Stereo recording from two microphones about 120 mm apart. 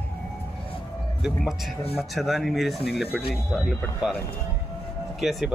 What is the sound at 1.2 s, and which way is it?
Speech, centre (ahead or behind).